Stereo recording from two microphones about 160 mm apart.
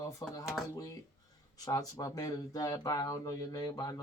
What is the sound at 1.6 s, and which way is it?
Speech, 20° left (ahead or behind).